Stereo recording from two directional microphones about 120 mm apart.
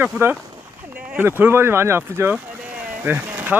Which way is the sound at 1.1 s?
15° right (ahead or behind).